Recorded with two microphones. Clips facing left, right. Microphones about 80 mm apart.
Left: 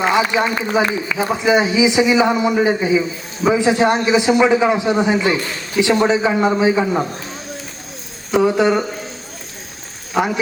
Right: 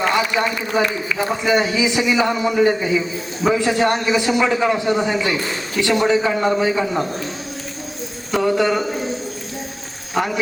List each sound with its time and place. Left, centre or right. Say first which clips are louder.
0.0 s a sound: left 3 dB; centre
1.1 s a man's voice: left 3 dB; centre
8.3 s a man's voice: left 3 dB; centre
10.2 s a man's voice: left 3 dB; centre